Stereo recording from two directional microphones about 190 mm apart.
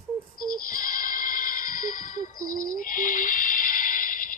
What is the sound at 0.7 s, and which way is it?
Music, 45° left (ahead or behind).